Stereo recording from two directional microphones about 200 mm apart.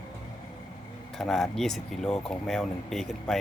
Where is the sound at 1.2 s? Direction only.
Centre (ahead or behind).